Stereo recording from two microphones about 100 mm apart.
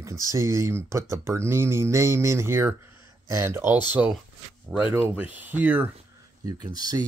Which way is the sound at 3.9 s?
10° right (ahead or behind).